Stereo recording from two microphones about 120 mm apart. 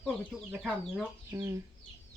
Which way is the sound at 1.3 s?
25° right (ahead or behind).